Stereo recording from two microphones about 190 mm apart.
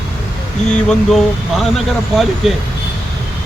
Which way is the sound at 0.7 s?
Centre (ahead or behind).